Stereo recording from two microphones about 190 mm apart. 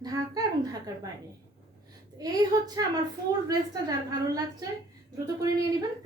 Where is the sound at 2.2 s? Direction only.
20° right (ahead or behind).